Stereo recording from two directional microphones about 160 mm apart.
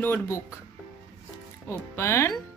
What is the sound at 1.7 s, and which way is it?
Speech, 15° left (ahead or behind).